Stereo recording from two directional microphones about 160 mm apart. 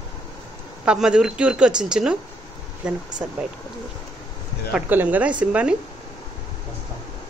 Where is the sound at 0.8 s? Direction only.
5° right (ahead or behind).